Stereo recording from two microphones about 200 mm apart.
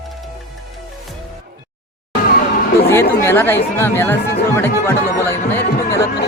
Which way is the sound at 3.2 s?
10° left (ahead or behind).